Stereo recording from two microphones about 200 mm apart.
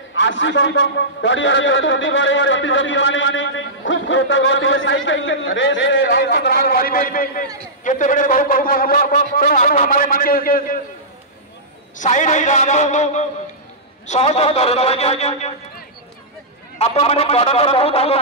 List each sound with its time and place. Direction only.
0.1 s a man's voice: 65° left (ahead or behind); by 10.8 s 45° left (ahead or behind)
12.0 s a man's voice: 35° left (ahead or behind)
16.7 s speech: 30° left (ahead or behind)